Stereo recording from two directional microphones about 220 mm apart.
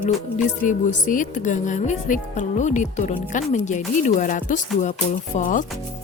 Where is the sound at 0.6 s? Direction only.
35° left (ahead or behind).